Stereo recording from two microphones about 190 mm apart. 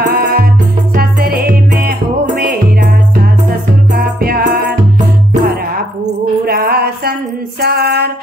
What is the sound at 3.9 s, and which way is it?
Music, 50° right (ahead or behind).